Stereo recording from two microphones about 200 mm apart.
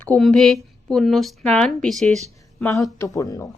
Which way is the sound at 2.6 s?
15° left (ahead or behind).